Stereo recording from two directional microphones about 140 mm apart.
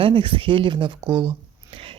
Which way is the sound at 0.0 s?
35° right (ahead or behind).